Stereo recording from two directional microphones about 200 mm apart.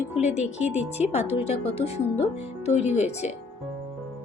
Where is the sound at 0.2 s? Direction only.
35° left (ahead or behind).